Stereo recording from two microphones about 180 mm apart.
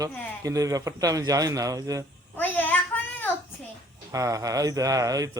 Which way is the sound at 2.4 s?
10° left (ahead or behind).